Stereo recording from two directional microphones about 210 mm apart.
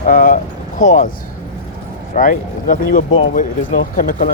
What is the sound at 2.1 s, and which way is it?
Speech, 40° left (ahead or behind).